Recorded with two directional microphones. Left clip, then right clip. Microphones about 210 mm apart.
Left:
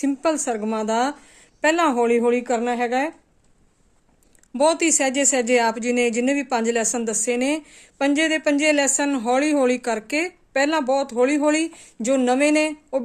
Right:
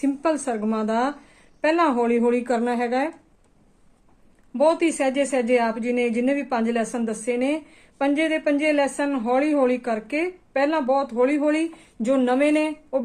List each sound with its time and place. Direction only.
0.0 s a woman's voice: 40° left (ahead or behind)
4.5 s speech: 50° left (ahead or behind)